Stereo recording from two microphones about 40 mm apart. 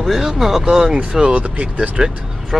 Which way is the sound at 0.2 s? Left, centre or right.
Centre.